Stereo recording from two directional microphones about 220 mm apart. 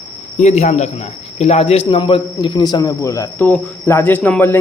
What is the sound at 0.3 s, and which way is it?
A man's voice, 30° left (ahead or behind).